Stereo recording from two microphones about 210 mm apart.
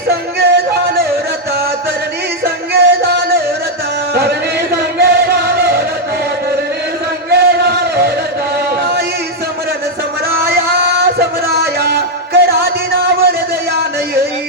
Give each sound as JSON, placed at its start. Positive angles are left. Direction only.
{"t": 0.1, "sound": "music", "side_deg": -45}
{"t": 2.4, "sound": "music", "side_deg": -50}
{"t": 7.3, "sound": "a sound", "side_deg": -50}
{"t": 10.4, "sound": "music", "side_deg": -45}